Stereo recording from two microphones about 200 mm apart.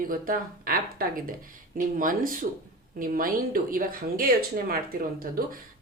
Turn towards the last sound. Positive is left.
turn(degrees=-45)  # may be behind; listen again after turning